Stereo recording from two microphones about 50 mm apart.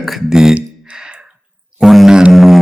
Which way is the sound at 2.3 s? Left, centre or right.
Centre.